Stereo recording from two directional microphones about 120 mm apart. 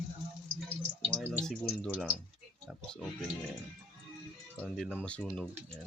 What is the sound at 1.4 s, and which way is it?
Speech, 5° left (ahead or behind).